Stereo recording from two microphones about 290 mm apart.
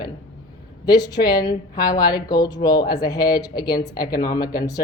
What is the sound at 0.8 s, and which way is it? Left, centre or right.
A woman's voice, centre.